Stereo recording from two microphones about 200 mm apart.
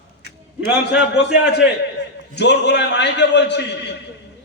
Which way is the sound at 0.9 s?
60° left (ahead or behind).